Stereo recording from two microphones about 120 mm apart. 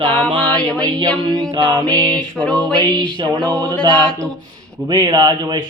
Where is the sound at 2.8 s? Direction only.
35° right (ahead or behind).